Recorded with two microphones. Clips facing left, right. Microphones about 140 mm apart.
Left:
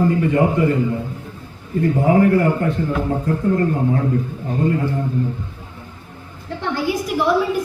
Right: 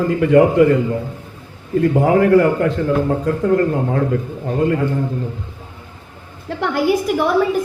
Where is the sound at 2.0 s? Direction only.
90° right.